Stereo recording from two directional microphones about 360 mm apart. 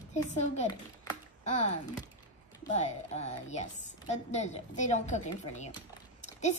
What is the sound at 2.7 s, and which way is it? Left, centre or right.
A child's voice, centre.